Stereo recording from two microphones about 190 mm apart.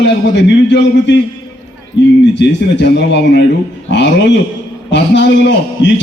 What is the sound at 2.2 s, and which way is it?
A man's voice, 65° left (ahead or behind).